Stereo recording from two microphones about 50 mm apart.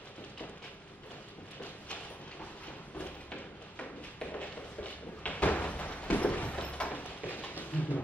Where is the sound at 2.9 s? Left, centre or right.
Left.